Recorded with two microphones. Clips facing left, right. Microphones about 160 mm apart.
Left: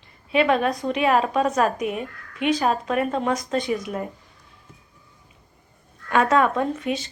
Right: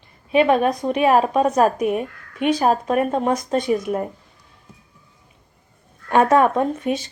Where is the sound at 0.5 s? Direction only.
45° right (ahead or behind).